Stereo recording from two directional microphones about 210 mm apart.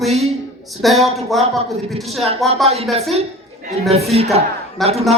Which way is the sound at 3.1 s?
35° right (ahead or behind).